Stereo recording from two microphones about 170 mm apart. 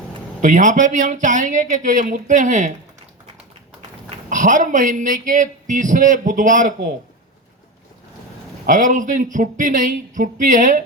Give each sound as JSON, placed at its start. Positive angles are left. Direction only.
{"t": 0.4, "sound": "speech", "side_deg": -50}
{"t": 4.3, "sound": "speech", "side_deg": -50}
{"t": 8.6, "sound": "speech", "side_deg": -50}